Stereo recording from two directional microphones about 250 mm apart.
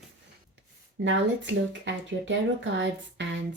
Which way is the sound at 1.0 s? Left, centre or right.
Right.